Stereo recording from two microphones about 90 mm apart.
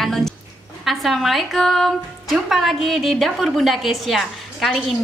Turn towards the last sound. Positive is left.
turn(degrees=0)  # may be behind; listen again after turning